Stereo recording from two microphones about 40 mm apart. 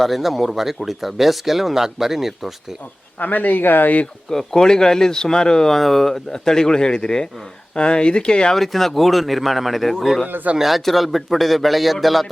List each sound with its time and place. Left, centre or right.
0.0 s a man's voice: centre
3.2 s speech: left
4.3 s speech: centre
5.7 s speech: centre; by 8.5 s left
8.5 s a man's voice: centre
10.2 s speech: right
10.6 s a man's voice: centre